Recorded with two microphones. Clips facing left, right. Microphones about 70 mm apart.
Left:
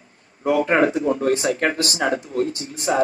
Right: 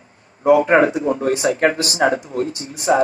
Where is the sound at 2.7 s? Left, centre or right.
Right.